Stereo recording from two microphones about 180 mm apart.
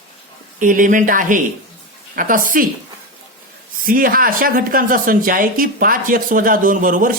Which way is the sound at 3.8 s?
50° right (ahead or behind).